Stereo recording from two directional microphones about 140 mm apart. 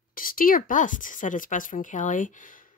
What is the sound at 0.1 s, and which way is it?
Speech, 90° left.